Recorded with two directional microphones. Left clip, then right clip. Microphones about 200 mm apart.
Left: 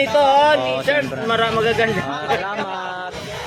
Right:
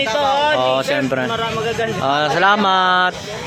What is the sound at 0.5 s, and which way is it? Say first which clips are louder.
Speech: right 3 dB; 25° right (ahead or behind).